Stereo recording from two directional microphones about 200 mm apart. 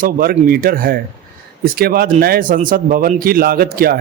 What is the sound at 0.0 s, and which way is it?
Speech, 45° right (ahead or behind).